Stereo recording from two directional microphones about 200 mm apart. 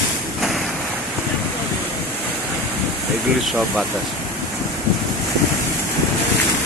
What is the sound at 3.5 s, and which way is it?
Speech, centre (ahead or behind).